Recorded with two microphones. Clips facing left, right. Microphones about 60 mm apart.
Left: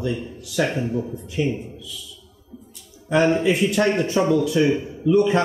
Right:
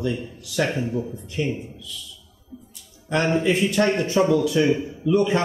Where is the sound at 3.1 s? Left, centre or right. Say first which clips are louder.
Left 3 dB; centre.